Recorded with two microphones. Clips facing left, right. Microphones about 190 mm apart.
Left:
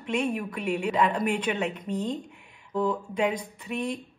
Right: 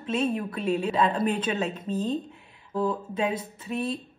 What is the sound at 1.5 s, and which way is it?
Speech, 15° left (ahead or behind).